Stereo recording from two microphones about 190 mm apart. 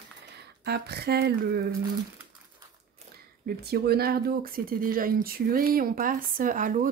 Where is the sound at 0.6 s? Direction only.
60° right (ahead or behind).